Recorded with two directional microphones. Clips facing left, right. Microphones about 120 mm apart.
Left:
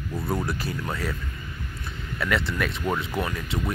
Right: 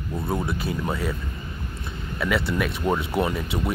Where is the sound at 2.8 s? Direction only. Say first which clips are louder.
Right 4 dB; 25° right (ahead or behind).